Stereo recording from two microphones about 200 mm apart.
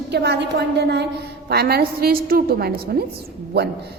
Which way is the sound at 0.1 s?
55° right (ahead or behind).